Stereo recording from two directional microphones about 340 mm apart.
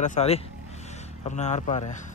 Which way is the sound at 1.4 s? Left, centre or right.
Centre.